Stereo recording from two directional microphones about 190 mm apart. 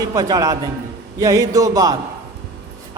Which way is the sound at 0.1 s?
20° right (ahead or behind).